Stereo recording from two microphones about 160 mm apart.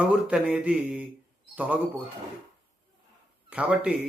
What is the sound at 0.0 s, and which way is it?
Speech, 5° right (ahead or behind).